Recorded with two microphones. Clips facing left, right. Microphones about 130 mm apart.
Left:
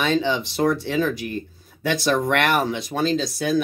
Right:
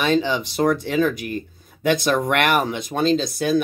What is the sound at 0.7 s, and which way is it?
Speech, 50° right (ahead or behind).